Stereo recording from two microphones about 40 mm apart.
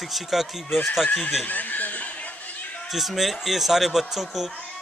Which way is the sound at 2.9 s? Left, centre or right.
Centre.